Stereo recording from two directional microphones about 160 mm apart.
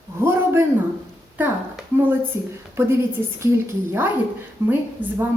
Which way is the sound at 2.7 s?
15° right (ahead or behind).